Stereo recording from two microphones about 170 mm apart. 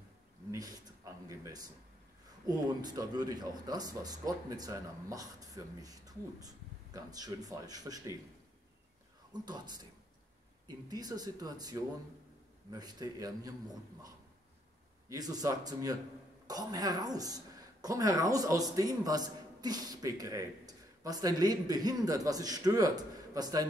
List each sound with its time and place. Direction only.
0.5 s a sound: 20° right (ahead or behind)
2.4 s a man's voice: 25° right (ahead or behind)
9.5 s a man's voice: 25° right (ahead or behind)